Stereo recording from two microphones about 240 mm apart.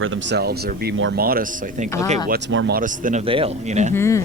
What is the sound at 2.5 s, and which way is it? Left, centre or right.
Speech, right.